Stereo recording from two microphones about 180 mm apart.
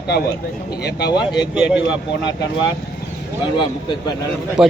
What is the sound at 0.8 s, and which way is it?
Speech, 65° left (ahead or behind).